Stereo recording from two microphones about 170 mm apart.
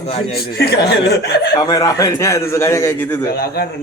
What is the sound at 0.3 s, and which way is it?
A man's voice, 65° left (ahead or behind).